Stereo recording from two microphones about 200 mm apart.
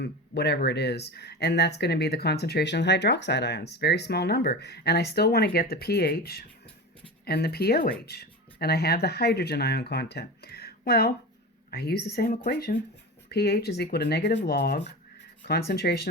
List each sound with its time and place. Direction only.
0.0 s speech: 55° left (ahead or behind)